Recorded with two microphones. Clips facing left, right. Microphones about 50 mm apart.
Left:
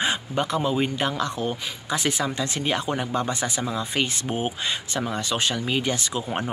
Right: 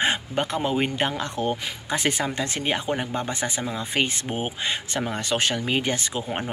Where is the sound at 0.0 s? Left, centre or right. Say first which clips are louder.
Right 1 dB; right.